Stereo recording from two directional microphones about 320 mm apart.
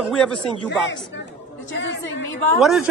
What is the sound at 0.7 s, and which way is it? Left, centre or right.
Speech, left.